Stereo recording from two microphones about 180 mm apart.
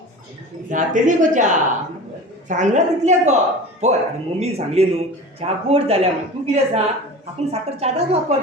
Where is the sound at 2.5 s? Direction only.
40° right (ahead or behind).